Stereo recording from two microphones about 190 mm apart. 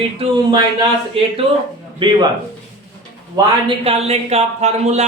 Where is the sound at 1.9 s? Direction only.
25° right (ahead or behind).